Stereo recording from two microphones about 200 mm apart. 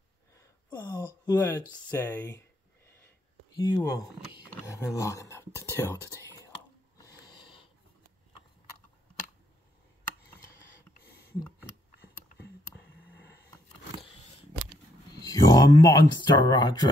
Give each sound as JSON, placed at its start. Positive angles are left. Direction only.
{"t": 0.3, "sound": "speech", "side_deg": 15}
{"t": 3.5, "sound": "speech", "side_deg": 20}
{"t": 7.0, "sound": "snort", "side_deg": 20}
{"t": 15.1, "sound": "speech", "side_deg": 20}